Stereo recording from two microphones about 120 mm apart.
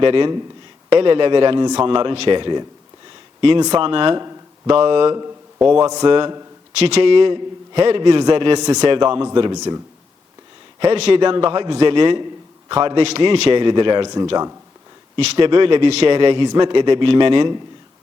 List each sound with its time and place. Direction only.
0.0 s a man's voice: 45° right (ahead or behind)
3.8 s a man's voice: 45° right (ahead or behind)
4.2 s a sound: 30° right (ahead or behind)
4.8 s a man's voice: 50° right (ahead or behind)
6.7 s a man's voice: 60° right (ahead or behind)
8.5 s speech: 35° right (ahead or behind)
10.9 s a man's voice: 60° right (ahead or behind)
11.2 s a man's voice: 45° right (ahead or behind)
15.1 s a man's voice: 45° right (ahead or behind)
16.1 s a man's voice: 45° right (ahead or behind)